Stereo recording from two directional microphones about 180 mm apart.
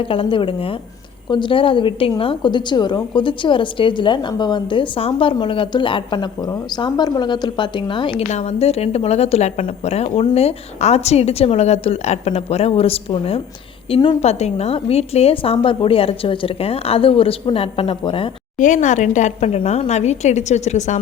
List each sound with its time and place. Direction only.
0.0 s a woman's voice: 30° left (ahead or behind)
18.6 s a woman's voice: 45° left (ahead or behind)